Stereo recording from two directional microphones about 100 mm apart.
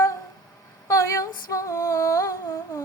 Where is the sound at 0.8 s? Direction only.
30° left (ahead or behind).